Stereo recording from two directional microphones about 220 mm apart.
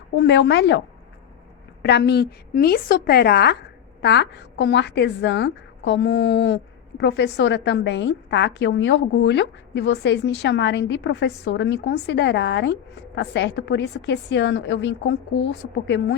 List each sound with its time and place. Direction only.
0.2 s a woman's voice: 50° left (ahead or behind)
1.8 s a woman's voice: 50° left (ahead or behind)